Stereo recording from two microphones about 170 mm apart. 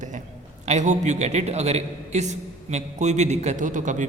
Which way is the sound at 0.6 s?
45° right (ahead or behind).